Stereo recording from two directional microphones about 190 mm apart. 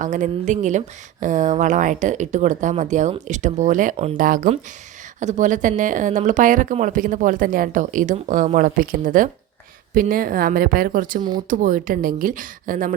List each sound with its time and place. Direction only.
0.0 s speech: 40° right (ahead or behind)